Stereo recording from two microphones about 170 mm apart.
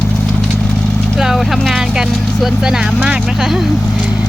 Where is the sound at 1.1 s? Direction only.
Centre (ahead or behind).